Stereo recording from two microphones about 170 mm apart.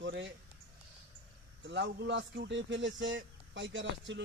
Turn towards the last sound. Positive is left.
turn(degrees=-90)